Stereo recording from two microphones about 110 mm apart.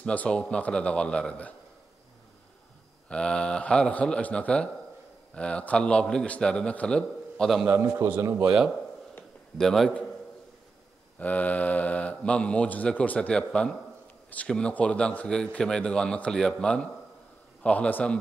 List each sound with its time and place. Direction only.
0.0 s a man's voice: 10° left (ahead or behind)
3.1 s a man's voice: 10° left (ahead or behind)
7.6 s a man's voice: 25° right (ahead or behind)
8.5 s speech: 10° right (ahead or behind)
9.6 s a man's voice: 5° left (ahead or behind)
11.1 s a man's voice: 15° left (ahead or behind)